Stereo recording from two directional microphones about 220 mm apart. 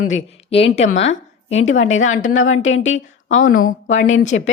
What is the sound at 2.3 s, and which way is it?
Speech, 65° left (ahead or behind).